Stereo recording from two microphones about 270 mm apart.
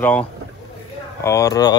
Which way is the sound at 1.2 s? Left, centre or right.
Centre.